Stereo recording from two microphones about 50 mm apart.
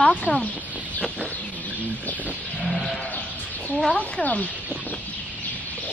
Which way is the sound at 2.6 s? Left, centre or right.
Centre.